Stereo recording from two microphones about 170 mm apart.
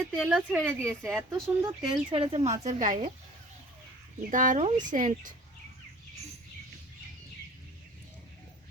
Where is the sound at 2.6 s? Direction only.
45° right (ahead or behind).